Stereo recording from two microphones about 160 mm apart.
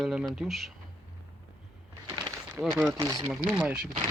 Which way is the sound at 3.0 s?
25° right (ahead or behind).